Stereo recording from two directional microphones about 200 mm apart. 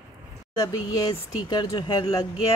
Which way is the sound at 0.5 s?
20° left (ahead or behind).